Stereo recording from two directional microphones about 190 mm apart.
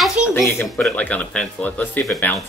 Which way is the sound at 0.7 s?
Centre (ahead or behind).